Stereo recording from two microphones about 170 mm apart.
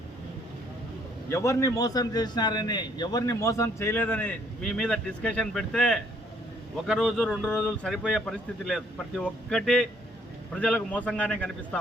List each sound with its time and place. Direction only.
1.3 s a man's voice: 15° left (ahead or behind)